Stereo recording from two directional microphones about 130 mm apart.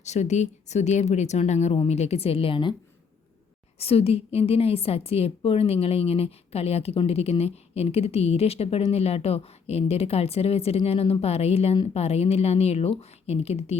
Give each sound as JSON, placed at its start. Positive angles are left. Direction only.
{"t": 0.0, "sound": "a woman's voice", "side_deg": 60}
{"t": 3.8, "sound": "a woman's voice", "side_deg": 50}